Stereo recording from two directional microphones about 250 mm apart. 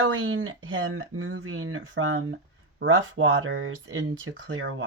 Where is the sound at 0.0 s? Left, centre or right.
Right.